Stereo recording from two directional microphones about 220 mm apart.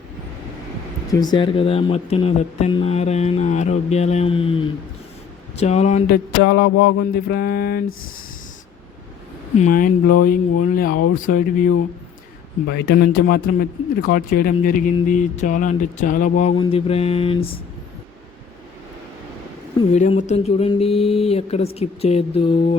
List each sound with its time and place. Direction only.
1.1 s speech: 20° left (ahead or behind)
6.4 s a sound: 50° left (ahead or behind)
9.6 s speech: 35° left (ahead or behind)
12.7 s a sound: 50° left (ahead or behind)
14.1 s speech: 40° left (ahead or behind)
16.6 s speech: 25° left (ahead or behind)
19.9 s speech: 35° left (ahead or behind)